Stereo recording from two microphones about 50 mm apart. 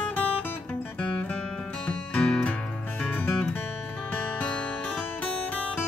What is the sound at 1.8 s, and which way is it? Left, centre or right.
Music, left.